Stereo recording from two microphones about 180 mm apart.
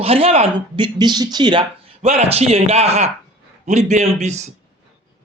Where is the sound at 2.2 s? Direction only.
35° right (ahead or behind).